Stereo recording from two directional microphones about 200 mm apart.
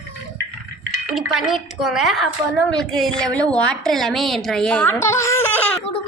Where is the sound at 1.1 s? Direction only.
Centre (ahead or behind).